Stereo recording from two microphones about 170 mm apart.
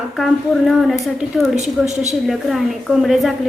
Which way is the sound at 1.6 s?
40° right (ahead or behind).